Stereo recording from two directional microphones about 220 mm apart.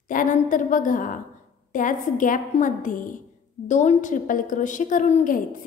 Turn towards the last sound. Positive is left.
turn(degrees=40)  # may be behind; listen again after turning